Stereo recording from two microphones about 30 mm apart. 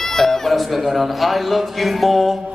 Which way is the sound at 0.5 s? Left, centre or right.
Centre.